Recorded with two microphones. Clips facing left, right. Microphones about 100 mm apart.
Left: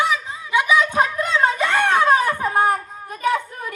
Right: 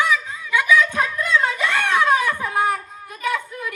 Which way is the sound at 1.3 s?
35° left (ahead or behind).